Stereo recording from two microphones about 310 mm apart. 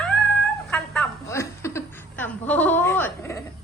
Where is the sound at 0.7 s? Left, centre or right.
Centre.